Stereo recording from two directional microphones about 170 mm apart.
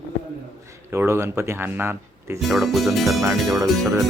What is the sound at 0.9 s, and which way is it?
Speech, 15° right (ahead or behind).